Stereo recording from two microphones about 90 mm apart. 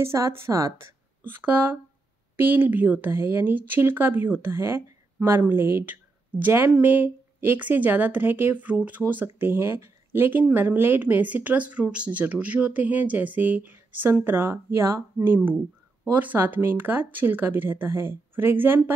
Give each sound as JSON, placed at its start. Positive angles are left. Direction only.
{"t": 0.0, "sound": "a woman's voice", "side_deg": -30}
{"t": 1.2, "sound": "speech", "side_deg": -20}